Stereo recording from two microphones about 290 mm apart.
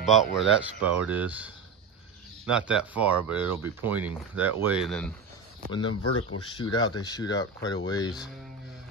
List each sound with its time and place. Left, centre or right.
0.4 s speech: centre
2.5 s speech: centre
5.8 s speech: left
6.5 s speech: centre